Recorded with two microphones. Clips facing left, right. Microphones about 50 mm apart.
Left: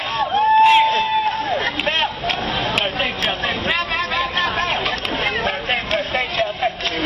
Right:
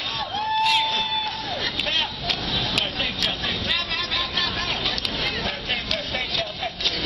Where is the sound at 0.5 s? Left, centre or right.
Left.